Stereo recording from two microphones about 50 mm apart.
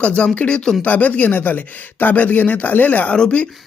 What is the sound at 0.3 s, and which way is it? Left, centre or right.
Speech, left.